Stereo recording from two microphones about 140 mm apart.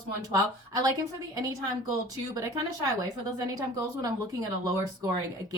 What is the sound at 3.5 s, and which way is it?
Speech, 25° right (ahead or behind).